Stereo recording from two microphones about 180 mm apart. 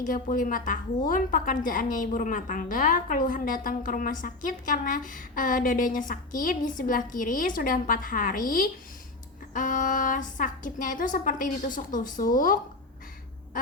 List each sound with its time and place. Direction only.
0.0 s a woman's voice: 50° left (ahead or behind)